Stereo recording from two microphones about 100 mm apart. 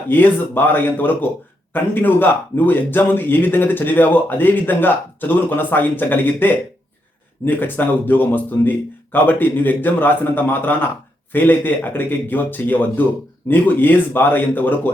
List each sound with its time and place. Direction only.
0.1 s speech: 20° left (ahead or behind)